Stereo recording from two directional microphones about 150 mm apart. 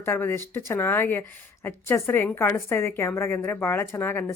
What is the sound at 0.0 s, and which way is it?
A woman's voice, 15° left (ahead or behind).